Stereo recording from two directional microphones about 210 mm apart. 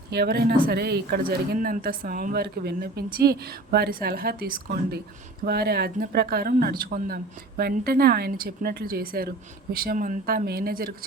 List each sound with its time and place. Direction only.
0.1 s speech: 50° right (ahead or behind)